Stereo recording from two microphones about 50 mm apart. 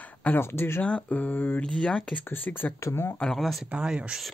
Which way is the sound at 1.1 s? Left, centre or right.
Left.